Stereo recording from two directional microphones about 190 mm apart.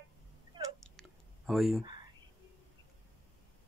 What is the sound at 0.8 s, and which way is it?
Whispering, centre (ahead or behind).